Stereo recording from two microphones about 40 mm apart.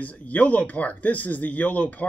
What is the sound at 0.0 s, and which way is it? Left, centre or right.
Speech, left.